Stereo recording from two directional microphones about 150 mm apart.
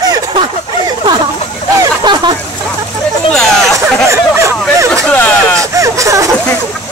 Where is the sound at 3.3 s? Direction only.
5° left (ahead or behind).